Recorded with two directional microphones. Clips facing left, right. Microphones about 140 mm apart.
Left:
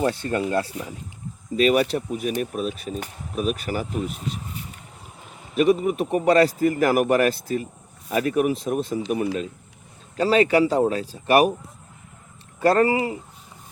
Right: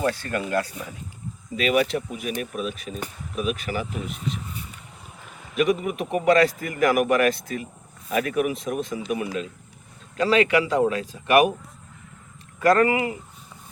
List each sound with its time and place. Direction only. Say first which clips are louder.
0.0 s speech: left 3 dB; 25° left (ahead or behind)
1.5 s a man's voice: left 3 dB; 40° left (ahead or behind)
5.5 s a man's voice: left 3 dB; 35° left (ahead or behind)
12.5 s speech: even; 30° left (ahead or behind)